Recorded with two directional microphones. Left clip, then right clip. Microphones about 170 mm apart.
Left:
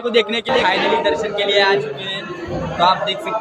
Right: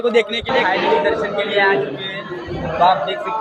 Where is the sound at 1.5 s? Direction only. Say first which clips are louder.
Left 1 dB; 20° left (ahead or behind).